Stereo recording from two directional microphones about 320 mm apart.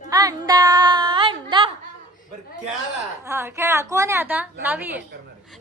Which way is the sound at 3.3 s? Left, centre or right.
Centre.